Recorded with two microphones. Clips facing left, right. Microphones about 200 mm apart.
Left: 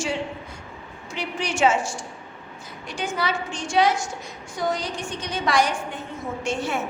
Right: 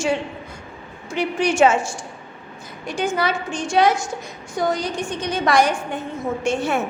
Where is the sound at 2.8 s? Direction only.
50° right (ahead or behind).